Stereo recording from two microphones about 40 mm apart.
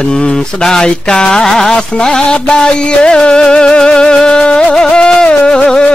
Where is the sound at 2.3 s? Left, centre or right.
Left.